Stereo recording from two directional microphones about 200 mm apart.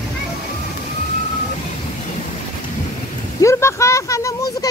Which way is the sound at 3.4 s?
15° left (ahead or behind).